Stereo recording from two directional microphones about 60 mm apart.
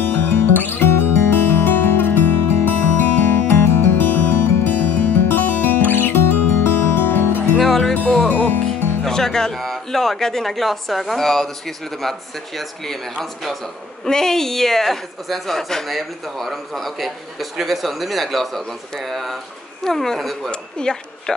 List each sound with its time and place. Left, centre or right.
0.0 s music: left
3.6 s music: left
4.0 s music: left
7.5 s music: centre
8.3 s music: left
8.6 s speech: centre
20.7 s speech: centre